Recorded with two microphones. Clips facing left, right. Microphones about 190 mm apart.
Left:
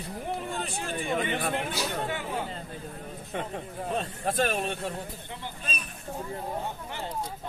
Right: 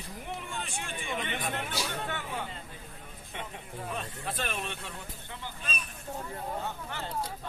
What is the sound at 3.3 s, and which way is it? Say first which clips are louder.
Speech: left 7 dB; 45° left (ahead or behind).